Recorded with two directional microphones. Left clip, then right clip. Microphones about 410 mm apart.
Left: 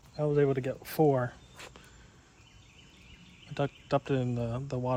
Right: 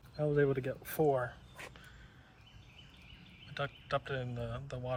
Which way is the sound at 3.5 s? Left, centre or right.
Centre.